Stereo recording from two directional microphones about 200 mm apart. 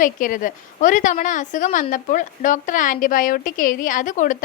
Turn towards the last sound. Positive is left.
turn(degrees=40)  # may be behind; listen again after turning